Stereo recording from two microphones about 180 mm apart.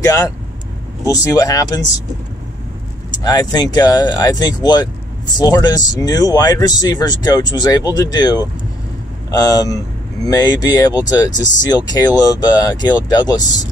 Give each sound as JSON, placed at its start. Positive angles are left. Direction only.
{"t": 0.0, "sound": "speech", "side_deg": 20}
{"t": 3.1, "sound": "speech", "side_deg": 20}